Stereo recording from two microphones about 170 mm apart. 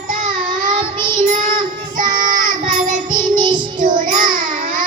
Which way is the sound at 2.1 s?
50° right (ahead or behind).